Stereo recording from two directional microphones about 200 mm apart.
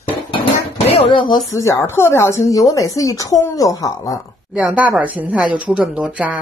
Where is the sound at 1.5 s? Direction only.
15° left (ahead or behind).